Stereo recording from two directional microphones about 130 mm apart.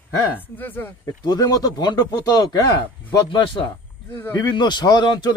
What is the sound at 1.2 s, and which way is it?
Speech, 30° left (ahead or behind).